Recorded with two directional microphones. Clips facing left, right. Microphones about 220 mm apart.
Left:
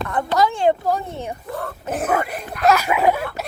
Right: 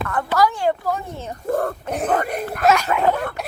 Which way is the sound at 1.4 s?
50° right (ahead or behind).